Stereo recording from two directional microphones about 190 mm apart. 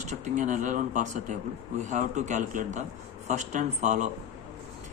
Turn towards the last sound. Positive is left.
turn(degrees=-40)  # may be behind; listen again after turning